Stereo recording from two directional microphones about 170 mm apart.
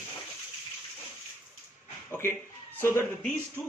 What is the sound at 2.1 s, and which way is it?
Speech, 15° left (ahead or behind).